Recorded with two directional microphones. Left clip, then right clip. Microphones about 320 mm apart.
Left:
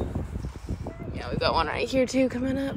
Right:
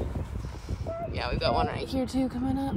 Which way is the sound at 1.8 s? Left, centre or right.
Centre.